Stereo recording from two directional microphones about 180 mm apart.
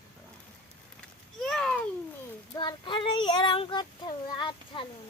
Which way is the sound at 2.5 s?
25° left (ahead or behind).